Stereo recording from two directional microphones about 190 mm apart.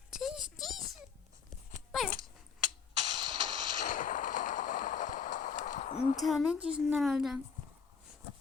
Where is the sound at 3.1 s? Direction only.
25° right (ahead or behind).